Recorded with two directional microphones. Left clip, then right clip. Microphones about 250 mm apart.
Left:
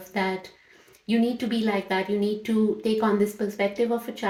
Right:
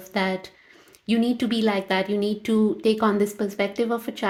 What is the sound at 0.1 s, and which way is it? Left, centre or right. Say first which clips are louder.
A woman's voice: right 2 dB; right.